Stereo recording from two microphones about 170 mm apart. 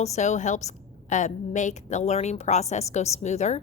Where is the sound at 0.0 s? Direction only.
40° left (ahead or behind).